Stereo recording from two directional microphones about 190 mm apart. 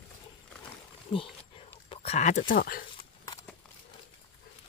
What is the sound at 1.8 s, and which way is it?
Speech, 35° left (ahead or behind).